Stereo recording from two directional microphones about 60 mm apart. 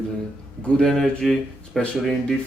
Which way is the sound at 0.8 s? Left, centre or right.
Centre.